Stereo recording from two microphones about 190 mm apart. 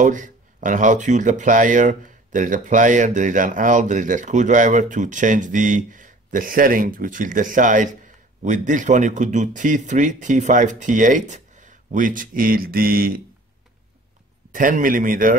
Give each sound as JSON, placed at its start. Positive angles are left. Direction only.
{"t": 0.0, "sound": "speech", "side_deg": -40}
{"t": 14.5, "sound": "speech", "side_deg": -45}